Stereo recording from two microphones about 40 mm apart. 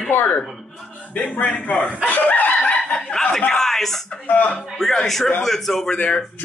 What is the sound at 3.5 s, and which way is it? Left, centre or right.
A man's voice, centre.